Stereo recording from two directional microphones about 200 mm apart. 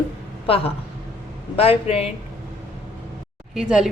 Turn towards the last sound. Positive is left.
turn(degrees=-5)  # may be behind; listen again after turning